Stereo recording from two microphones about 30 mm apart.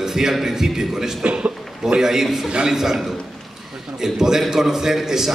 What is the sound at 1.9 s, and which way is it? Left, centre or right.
A man's voice, centre.